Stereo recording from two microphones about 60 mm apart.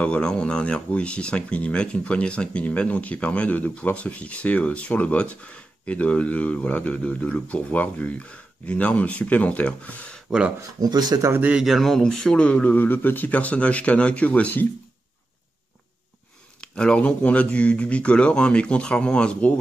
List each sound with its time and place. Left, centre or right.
0.0 s speech: centre
10.8 s speech: right
11.6 s speech: centre
12.7 s speech: left
16.6 s speech: centre